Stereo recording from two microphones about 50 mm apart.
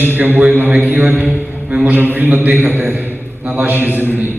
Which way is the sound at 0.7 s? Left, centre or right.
Right.